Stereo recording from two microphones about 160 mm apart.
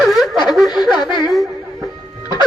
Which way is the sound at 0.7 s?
25° left (ahead or behind).